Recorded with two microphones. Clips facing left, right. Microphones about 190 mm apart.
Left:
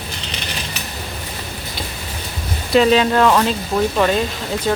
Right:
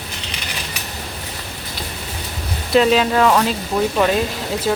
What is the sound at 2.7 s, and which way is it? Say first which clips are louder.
Speech: left 1 dB; centre (ahead or behind).